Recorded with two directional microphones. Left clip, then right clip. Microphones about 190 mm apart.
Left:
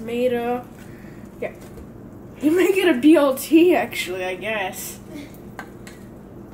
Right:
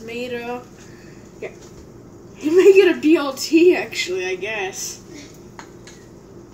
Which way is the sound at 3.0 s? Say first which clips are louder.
Left 3 dB; 45° left (ahead or behind).